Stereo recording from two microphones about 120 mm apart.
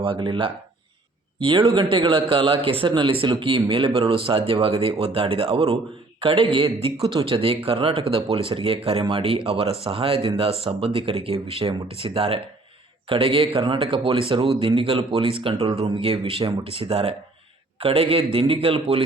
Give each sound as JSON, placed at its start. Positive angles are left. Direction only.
{"t": 0.0, "sound": "speech", "side_deg": -45}